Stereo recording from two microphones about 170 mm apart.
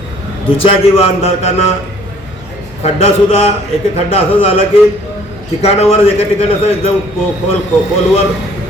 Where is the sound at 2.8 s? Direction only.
35° left (ahead or behind).